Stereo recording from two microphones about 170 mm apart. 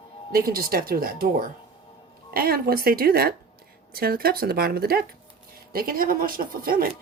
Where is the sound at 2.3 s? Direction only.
60° right (ahead or behind).